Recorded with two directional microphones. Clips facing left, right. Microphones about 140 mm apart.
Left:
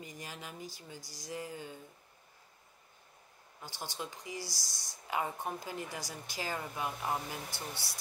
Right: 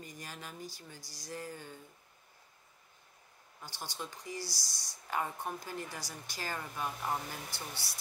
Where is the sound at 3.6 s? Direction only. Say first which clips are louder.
Left 1 dB; 20° left (ahead or behind).